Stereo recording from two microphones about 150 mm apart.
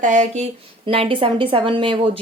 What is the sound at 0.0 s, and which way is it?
A woman's voice, 55° right (ahead or behind).